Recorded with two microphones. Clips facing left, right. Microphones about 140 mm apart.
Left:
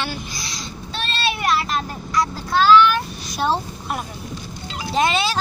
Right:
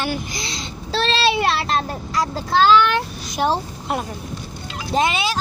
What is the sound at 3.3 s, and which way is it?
Speech, 15° right (ahead or behind).